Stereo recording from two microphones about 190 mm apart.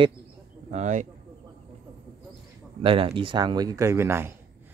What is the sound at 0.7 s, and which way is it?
Speech, 35° right (ahead or behind).